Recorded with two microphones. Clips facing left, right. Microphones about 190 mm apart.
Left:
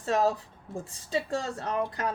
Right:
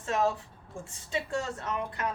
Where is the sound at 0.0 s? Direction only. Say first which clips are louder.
Left 3 dB; 35° left (ahead or behind).